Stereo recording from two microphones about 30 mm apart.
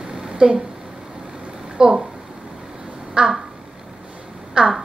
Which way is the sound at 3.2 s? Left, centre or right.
Right.